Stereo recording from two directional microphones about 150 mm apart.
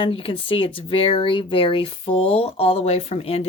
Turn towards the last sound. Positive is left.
turn(degrees=40)  # may be behind; listen again after turning